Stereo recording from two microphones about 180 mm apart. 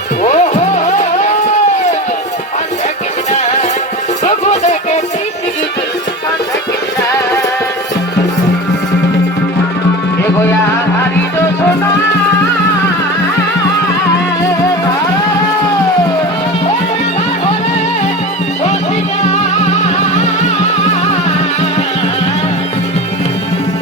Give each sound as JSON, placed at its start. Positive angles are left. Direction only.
{"t": 0.2, "sound": "music", "side_deg": 40}
{"t": 4.3, "sound": "music", "side_deg": 40}